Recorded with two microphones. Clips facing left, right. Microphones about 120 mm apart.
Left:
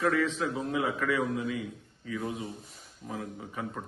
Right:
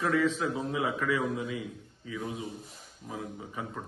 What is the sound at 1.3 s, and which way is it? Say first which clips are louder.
Speech: left 2 dB; 25° right (ahead or behind).